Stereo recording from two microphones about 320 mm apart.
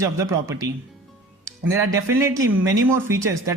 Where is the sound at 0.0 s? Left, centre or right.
Centre.